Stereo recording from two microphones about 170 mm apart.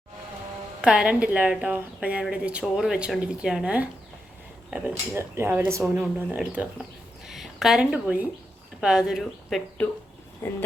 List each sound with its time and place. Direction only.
0.8 s speech: 5° right (ahead or behind)
9.8 s speech: 10° left (ahead or behind)